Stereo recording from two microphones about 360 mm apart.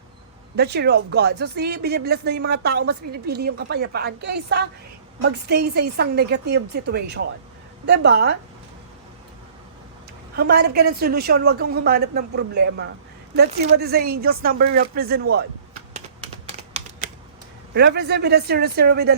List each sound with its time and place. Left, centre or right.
0.5 s speech: right
10.3 s speech: right
17.7 s speech: right